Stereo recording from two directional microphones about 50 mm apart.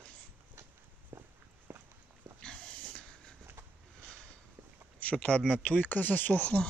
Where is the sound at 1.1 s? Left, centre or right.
Right.